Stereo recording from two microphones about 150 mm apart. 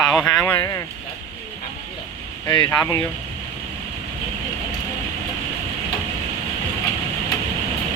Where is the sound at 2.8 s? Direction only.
20° left (ahead or behind).